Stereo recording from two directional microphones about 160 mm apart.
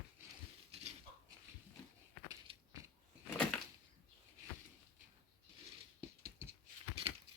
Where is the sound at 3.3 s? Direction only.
10° left (ahead or behind).